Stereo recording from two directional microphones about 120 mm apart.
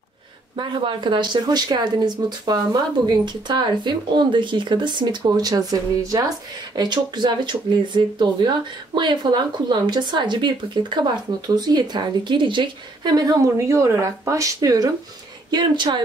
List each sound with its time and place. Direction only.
0.6 s speech: 45° right (ahead or behind)
15.5 s speech: 40° right (ahead or behind)